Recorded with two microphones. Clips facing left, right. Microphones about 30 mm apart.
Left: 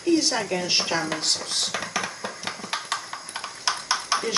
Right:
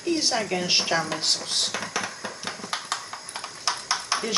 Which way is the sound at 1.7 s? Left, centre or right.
Centre.